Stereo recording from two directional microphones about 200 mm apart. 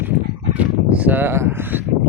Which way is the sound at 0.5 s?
5° right (ahead or behind).